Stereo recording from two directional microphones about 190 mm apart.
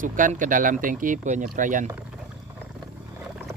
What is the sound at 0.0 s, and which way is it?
Speech, 45° right (ahead or behind).